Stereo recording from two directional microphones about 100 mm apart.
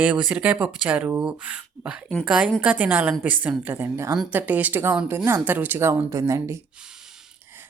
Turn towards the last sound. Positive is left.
turn(degrees=-20)  # may be behind; listen again after turning